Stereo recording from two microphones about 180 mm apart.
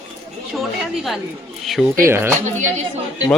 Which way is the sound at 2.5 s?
40° right (ahead or behind).